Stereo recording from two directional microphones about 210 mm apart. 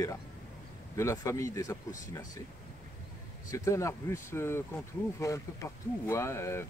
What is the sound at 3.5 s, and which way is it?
Speech, 15° left (ahead or behind).